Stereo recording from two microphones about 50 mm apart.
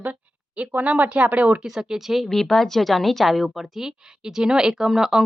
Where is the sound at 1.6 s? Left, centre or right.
Centre.